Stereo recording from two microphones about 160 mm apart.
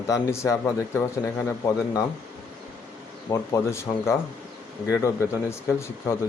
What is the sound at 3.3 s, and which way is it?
Speech, 15° left (ahead or behind).